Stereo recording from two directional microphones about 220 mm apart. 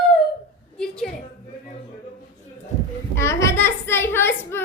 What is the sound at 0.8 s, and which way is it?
Speech, 5° left (ahead or behind).